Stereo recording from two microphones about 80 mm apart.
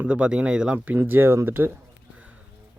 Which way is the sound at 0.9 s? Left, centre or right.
Right.